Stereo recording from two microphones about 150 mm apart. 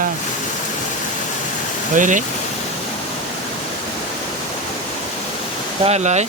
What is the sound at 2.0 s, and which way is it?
Speech, 60° right (ahead or behind).